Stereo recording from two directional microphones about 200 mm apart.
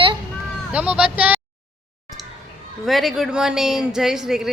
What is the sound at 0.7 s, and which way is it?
Speech, 5° right (ahead or behind).